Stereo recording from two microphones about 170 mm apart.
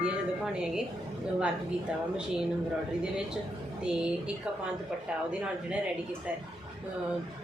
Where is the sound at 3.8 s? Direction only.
5° right (ahead or behind).